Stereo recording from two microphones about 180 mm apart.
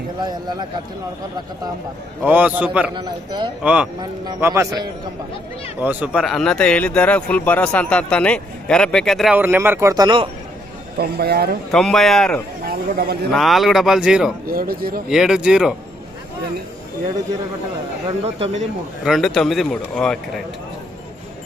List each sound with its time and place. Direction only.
0.2 s a man's voice: 25° right (ahead or behind)
2.2 s a man's voice: 10° right (ahead or behind)
10.9 s a man's voice: 60° right (ahead or behind)
11.7 s speech: centre (ahead or behind)
12.6 s speech: 60° right (ahead or behind)
13.3 s speech: centre (ahead or behind)
14.4 s a man's voice: 55° right (ahead or behind)
15.1 s speech: 5° right (ahead or behind)
18.3 s speech: 35° right (ahead or behind)
19.0 s speech: centre (ahead or behind)